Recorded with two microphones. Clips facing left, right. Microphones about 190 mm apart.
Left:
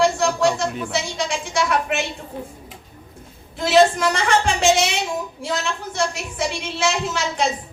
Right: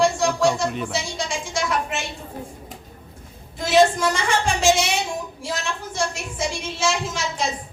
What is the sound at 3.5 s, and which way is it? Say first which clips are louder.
A woman's voice: left 2 dB; 65° left (ahead or behind).